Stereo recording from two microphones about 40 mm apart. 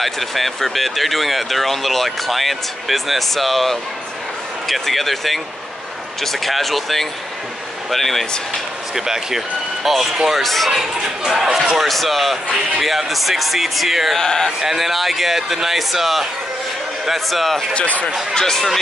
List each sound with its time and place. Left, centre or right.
0.0 s speech: centre
8.9 s speech: centre
10.7 s speech: centre
14.1 s speech: centre
14.6 s speech: centre
17.7 s speech: left
18.3 s speech: centre